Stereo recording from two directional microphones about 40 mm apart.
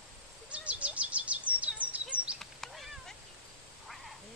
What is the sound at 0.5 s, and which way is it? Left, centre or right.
Bird, right.